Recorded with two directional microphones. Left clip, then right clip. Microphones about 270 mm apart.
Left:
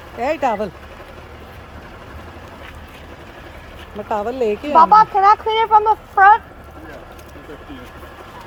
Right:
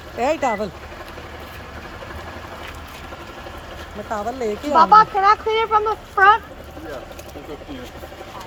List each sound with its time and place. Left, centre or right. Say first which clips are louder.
0.2 s speech: left 1 dB; centre
4.1 s speech: left 5 dB; centre
4.7 s speech: left 2 dB; left